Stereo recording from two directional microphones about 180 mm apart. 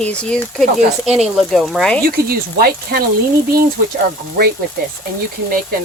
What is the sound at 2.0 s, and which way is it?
Speech, 55° right (ahead or behind).